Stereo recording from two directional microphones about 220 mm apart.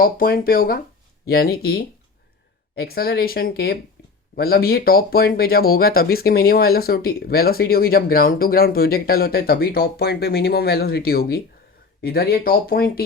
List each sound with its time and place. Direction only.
0.0 s speech: 40° left (ahead or behind)